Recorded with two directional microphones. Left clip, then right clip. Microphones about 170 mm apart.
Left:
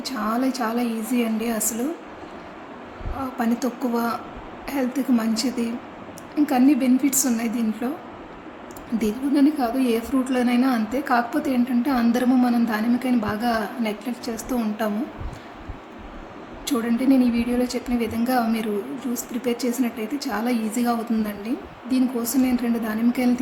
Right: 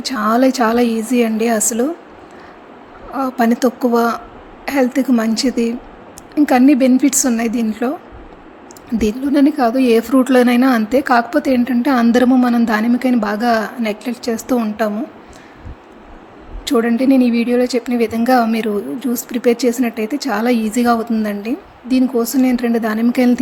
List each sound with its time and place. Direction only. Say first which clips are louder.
0.0 s speech: right 10 dB; 45° right (ahead or behind)
3.2 s speech: right 10 dB; 45° right (ahead or behind)
9.0 s a woman's voice: right 6 dB; 45° right (ahead or behind)
16.6 s speech: right 8 dB; 45° right (ahead or behind)